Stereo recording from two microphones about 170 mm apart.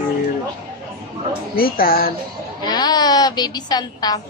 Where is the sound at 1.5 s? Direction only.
60° left (ahead or behind).